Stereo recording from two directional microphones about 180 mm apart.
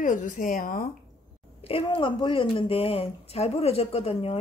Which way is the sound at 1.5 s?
30° left (ahead or behind).